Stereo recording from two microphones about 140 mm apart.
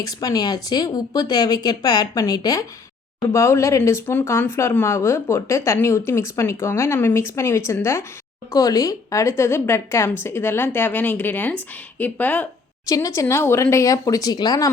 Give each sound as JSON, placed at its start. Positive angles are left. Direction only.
{"t": 0.0, "sound": "speech", "side_deg": 25}
{"t": 12.9, "sound": "speech", "side_deg": 25}